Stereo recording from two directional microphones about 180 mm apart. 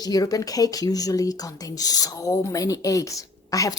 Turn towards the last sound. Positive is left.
turn(degrees=20)  # may be behind; listen again after turning